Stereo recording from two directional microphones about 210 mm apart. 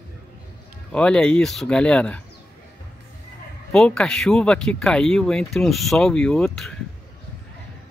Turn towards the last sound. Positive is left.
turn(degrees=0)  # may be behind; listen again after turning